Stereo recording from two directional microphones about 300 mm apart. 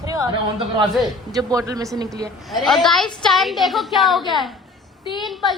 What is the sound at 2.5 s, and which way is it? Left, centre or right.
A man's voice, centre.